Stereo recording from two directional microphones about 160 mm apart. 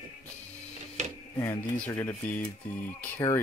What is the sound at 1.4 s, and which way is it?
Speech, 15° left (ahead or behind).